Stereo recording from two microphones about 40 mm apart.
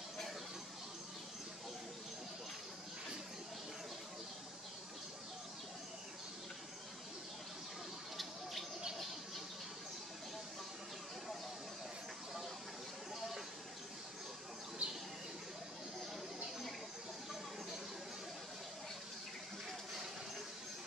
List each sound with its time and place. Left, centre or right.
14.8 s bird: right